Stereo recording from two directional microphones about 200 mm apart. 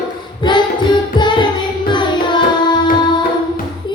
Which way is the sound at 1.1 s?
25° left (ahead or behind).